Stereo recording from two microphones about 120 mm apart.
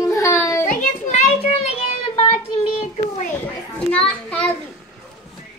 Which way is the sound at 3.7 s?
10° left (ahead or behind).